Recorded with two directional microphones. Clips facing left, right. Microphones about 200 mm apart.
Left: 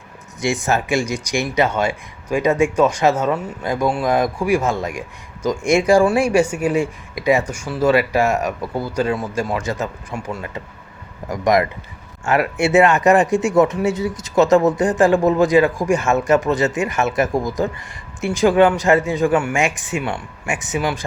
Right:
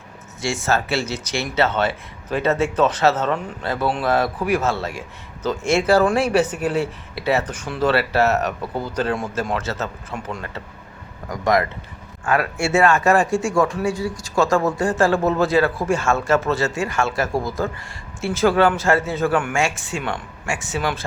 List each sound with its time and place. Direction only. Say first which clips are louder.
0.4 s speech: left 2 dB; 15° left (ahead or behind)